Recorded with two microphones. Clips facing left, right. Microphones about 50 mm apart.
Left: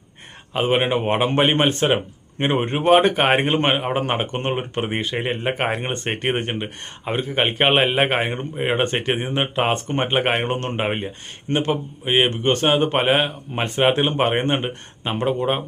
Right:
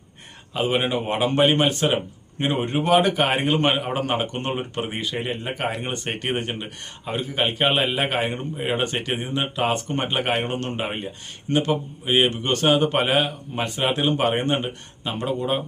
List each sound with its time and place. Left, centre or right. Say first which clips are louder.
0.5 s speech: left 3 dB; left
5.4 s speech: left 4 dB; left